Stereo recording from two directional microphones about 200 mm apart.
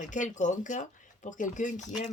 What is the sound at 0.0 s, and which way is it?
Speech, 40° left (ahead or behind).